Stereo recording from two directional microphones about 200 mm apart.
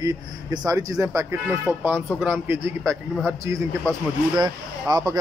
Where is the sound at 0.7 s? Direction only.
15° right (ahead or behind).